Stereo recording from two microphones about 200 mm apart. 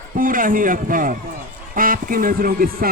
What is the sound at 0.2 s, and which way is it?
A man's voice, 45° right (ahead or behind).